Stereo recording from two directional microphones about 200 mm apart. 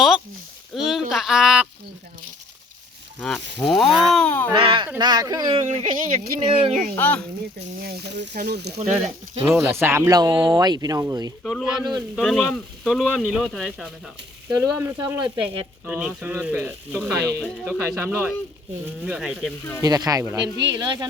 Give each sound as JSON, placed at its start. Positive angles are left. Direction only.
{"t": 0.7, "sound": "speech", "side_deg": 0}
{"t": 3.2, "sound": "speech", "side_deg": 5}
{"t": 4.5, "sound": "speech", "side_deg": -25}
{"t": 5.6, "sound": "speech", "side_deg": -40}
{"t": 6.4, "sound": "speech", "side_deg": -25}
{"t": 6.9, "sound": "speech", "side_deg": 10}
{"t": 7.9, "sound": "speech", "side_deg": -55}
{"t": 9.4, "sound": "speech", "side_deg": -10}
{"t": 11.4, "sound": "speech", "side_deg": 0}
{"t": 11.8, "sound": "speech", "side_deg": -20}
{"t": 12.1, "sound": "speech", "side_deg": 5}
{"t": 14.6, "sound": "speech", "side_deg": -15}
{"t": 19.8, "sound": "speech", "side_deg": -20}